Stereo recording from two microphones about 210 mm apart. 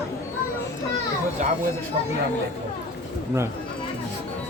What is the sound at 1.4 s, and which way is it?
Children playing, 35° right (ahead or behind).